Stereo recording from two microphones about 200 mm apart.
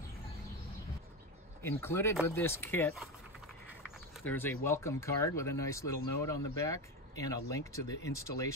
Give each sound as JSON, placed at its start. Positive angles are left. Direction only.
{"t": 1.6, "sound": "speech", "side_deg": 10}
{"t": 4.2, "sound": "speech", "side_deg": 10}